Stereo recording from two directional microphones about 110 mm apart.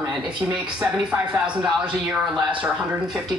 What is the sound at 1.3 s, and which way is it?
Speech, 15° right (ahead or behind).